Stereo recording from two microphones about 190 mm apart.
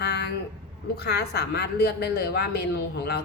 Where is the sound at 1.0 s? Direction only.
60° left (ahead or behind).